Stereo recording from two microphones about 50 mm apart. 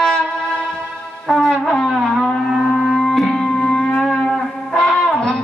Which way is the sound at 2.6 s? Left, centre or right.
Centre.